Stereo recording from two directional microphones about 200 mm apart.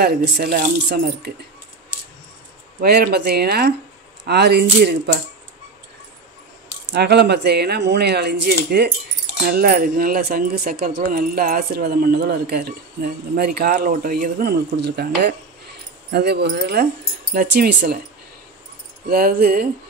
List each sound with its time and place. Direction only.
0.0 s speech: 50° right (ahead or behind)
2.8 s speech: 55° right (ahead or behind)
6.9 s speech: 55° right (ahead or behind)
19.0 s speech: 45° right (ahead or behind)